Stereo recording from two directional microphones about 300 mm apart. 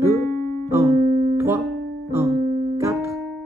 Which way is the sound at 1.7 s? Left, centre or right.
Right.